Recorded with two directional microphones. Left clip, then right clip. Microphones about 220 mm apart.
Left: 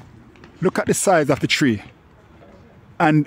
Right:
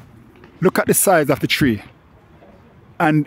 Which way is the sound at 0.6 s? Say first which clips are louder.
Right 3 dB; 15° right (ahead or behind).